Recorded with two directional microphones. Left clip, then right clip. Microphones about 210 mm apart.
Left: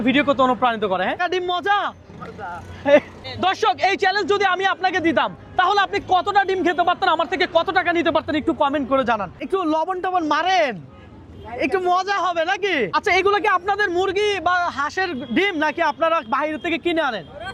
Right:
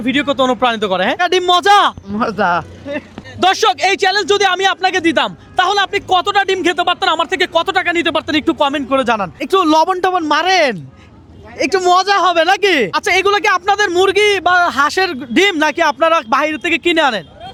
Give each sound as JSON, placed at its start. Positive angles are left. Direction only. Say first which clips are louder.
{"t": 0.0, "sound": "speech", "louder": "right 3 dB", "side_deg": -25}
{"t": 3.4, "sound": "speech", "louder": "right 6 dB", "side_deg": -40}
{"t": 12.9, "sound": "speech", "louder": "right 5 dB", "side_deg": -25}